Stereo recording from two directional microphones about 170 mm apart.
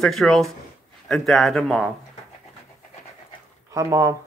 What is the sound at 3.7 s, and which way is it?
Speech, 20° right (ahead or behind).